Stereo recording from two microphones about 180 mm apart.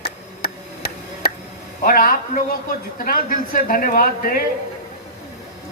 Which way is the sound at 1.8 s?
55° left (ahead or behind).